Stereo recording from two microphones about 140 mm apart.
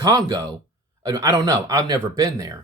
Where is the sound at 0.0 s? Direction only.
30° right (ahead or behind).